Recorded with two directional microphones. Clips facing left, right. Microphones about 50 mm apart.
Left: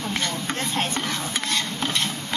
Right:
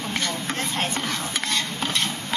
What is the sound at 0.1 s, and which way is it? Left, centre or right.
Stir, centre.